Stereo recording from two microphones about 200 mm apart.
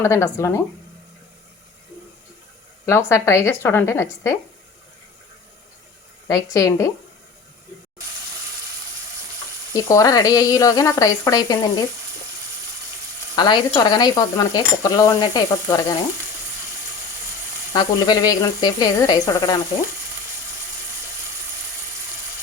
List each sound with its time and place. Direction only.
0.0 s speech: 15° left (ahead or behind)
2.8 s speech: 15° left (ahead or behind)
6.2 s speech: 15° left (ahead or behind)
9.7 s speech: 15° left (ahead or behind)
13.3 s speech: 20° left (ahead or behind)
17.7 s speech: 20° left (ahead or behind)